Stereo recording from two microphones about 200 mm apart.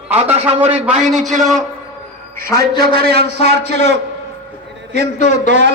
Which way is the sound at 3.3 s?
35° left (ahead or behind).